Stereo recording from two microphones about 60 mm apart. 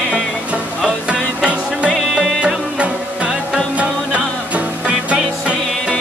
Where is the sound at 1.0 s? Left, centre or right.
Centre.